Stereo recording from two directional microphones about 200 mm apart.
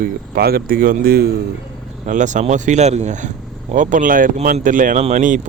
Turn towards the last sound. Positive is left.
turn(degrees=-40)  # may be behind; listen again after turning